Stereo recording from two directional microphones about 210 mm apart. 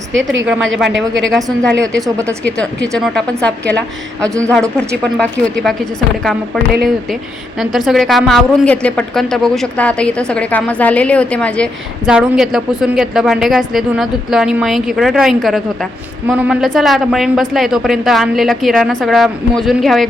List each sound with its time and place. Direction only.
0.1 s a woman's voice: 65° right (ahead or behind)
1.5 s a woman's voice: 5° left (ahead or behind)
2.0 s speech: 15° right (ahead or behind)
2.6 s a woman's voice: 5° left (ahead or behind)
5.1 s a woman's voice: centre (ahead or behind)
7.6 s a woman's voice: centre (ahead or behind)